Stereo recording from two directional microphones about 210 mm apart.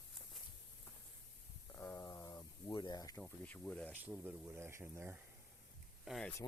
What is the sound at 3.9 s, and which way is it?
Speech, 10° right (ahead or behind).